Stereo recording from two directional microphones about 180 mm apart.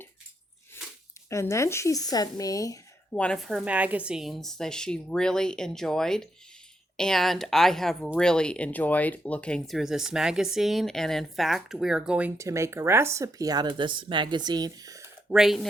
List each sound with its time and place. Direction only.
1.3 s speech: 15° left (ahead or behind)
3.1 s speech: 5° left (ahead or behind); by 15.0 s 20° right (ahead or behind)
15.3 s speech: centre (ahead or behind)